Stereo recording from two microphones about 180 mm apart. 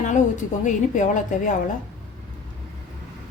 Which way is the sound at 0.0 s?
45° left (ahead or behind).